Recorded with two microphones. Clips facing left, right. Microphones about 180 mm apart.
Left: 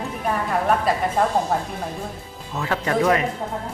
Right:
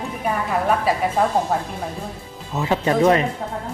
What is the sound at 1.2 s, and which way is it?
Speech, centre (ahead or behind).